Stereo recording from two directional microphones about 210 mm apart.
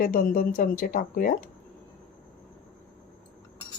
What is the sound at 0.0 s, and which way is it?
Speech, 45° left (ahead or behind).